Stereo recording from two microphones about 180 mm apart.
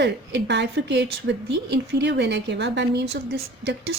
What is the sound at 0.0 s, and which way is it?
A woman's voice, 75° right (ahead or behind).